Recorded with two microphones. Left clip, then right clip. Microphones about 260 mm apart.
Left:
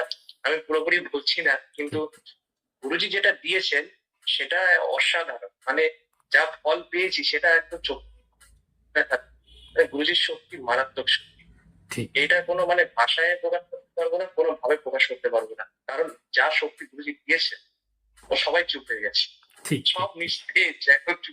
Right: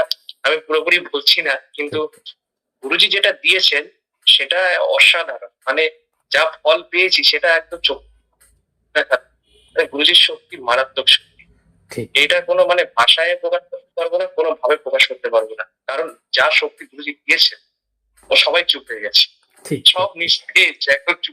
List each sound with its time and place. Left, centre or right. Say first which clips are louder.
0.1 s speech: right 8 dB; centre
9.0 s speech: right 7 dB; centre